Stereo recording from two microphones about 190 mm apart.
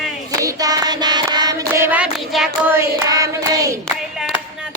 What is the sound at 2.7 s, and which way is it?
Hands, 15° right (ahead or behind).